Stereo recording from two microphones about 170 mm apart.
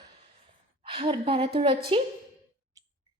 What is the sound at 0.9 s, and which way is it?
A woman's voice, 30° right (ahead or behind).